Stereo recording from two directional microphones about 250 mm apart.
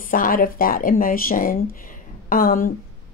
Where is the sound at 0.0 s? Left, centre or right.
Left.